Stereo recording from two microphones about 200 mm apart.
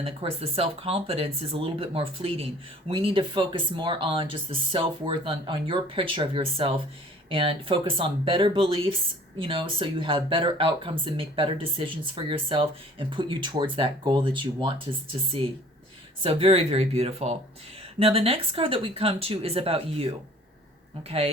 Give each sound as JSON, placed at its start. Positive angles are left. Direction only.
{"t": 0.0, "sound": "speech", "side_deg": -30}
{"t": 16.2, "sound": "speech", "side_deg": -30}